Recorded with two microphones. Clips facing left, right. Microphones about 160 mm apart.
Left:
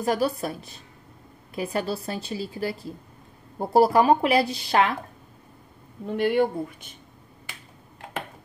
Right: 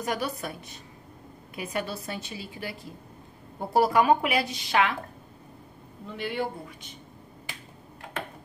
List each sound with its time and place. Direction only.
0.0 s speech: 35° left (ahead or behind)
6.0 s speech: 50° left (ahead or behind)